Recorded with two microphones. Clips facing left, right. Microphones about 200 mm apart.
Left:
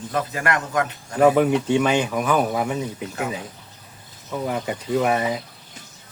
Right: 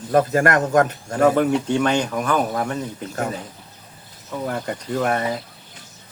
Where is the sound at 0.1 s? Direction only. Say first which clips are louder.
Right 8 dB; 50° right (ahead or behind).